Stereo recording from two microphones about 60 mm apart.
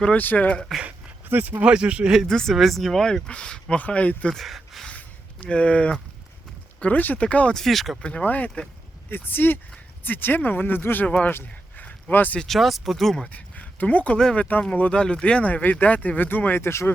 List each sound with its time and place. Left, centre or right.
0.2 s speech: left
1.3 s speech: right
1.6 s speech: centre
2.2 s speech: centre; by 4.3 s left
4.3 s speech: centre
4.9 s a sound: left
6.7 s speech: left
7.5 s speech: centre
8.2 s speech: left
11.8 s a sound: left
12.4 s speech: centre
13.2 s speech: left
16.6 s speech: left